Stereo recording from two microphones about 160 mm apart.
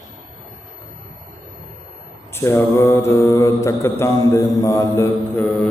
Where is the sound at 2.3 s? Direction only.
15° left (ahead or behind).